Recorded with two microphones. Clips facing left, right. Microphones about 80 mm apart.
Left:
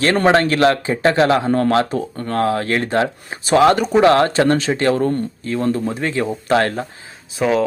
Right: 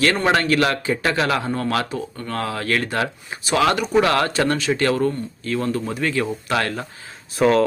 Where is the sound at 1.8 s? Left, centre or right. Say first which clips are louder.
Left 5 dB; left.